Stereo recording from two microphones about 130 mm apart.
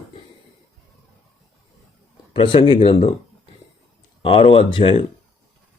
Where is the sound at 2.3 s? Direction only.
40° left (ahead or behind).